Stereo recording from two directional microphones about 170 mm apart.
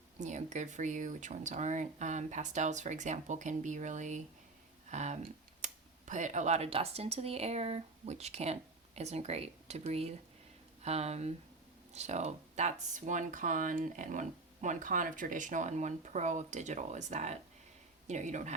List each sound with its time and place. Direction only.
0.2 s speech: 45° right (ahead or behind)